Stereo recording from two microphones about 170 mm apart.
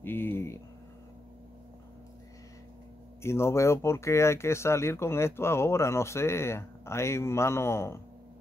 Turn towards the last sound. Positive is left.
turn(degrees=15)  # may be behind; listen again after turning